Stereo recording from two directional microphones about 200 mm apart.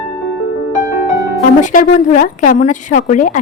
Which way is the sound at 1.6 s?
40° left (ahead or behind).